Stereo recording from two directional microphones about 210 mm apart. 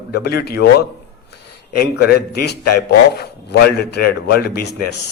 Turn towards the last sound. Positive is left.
turn(degrees=50)  # may be behind; listen again after turning